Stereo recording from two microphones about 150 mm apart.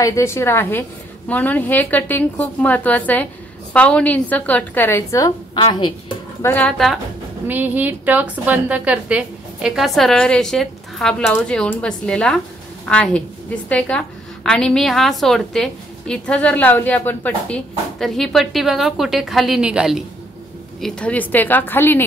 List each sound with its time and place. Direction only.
0.0 s a woman's voice: 20° left (ahead or behind)
5.5 s a woman's voice: 35° left (ahead or behind)
6.4 s a woman's voice: 10° left (ahead or behind)
7.4 s a woman's voice: 10° right (ahead or behind)
20.8 s a woman's voice: 10° left (ahead or behind)